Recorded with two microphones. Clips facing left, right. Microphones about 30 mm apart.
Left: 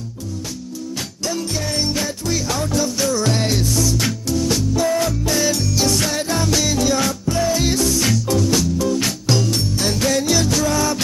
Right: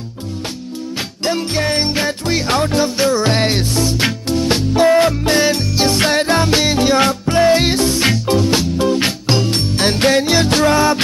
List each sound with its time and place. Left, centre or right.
1.2 s music: right